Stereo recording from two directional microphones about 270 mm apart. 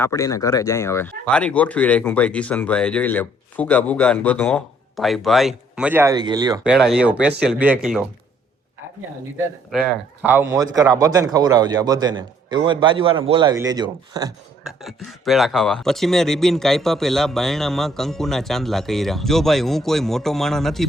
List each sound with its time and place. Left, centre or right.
0.0 s speech: centre
6.7 s speech: centre
9.7 s speech: centre
10.3 s speech: centre
14.8 s speech: centre